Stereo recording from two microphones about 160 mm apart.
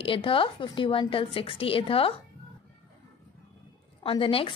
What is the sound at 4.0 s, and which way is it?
Speech, 35° left (ahead or behind).